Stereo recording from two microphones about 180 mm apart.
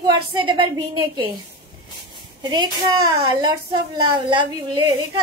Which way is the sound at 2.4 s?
25° right (ahead or behind).